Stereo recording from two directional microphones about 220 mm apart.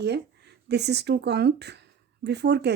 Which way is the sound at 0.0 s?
50° right (ahead or behind).